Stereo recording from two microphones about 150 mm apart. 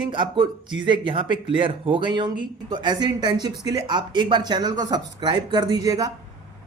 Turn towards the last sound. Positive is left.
turn(degrees=-25)  # may be behind; listen again after turning